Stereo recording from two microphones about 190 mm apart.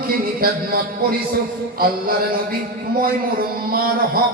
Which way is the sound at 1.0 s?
50° right (ahead or behind).